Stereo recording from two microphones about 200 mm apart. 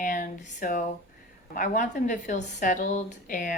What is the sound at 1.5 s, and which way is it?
A woman's voice, 40° left (ahead or behind).